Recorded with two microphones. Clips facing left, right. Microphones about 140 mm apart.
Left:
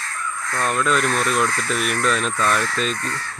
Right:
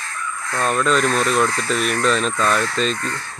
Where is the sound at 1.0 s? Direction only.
25° right (ahead or behind).